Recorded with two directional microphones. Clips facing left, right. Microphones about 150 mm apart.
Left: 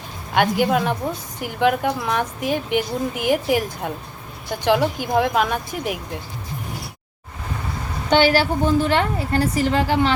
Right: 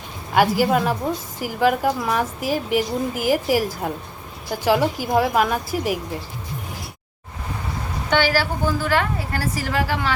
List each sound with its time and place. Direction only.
0.3 s a woman's voice: 5° right (ahead or behind)
8.1 s a woman's voice: 25° left (ahead or behind)